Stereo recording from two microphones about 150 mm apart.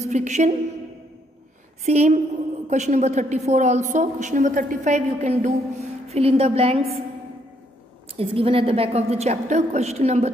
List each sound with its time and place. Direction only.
0.1 s a woman's voice: 50° right (ahead or behind)
1.9 s a woman's voice: 45° right (ahead or behind)
8.2 s a woman's voice: 40° right (ahead or behind)